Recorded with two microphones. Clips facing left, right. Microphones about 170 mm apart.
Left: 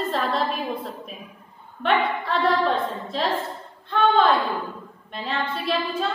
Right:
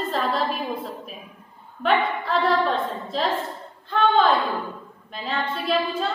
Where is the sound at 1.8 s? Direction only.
Centre (ahead or behind).